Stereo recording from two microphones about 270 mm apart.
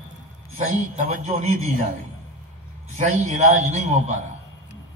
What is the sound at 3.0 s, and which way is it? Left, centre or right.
Speech, right.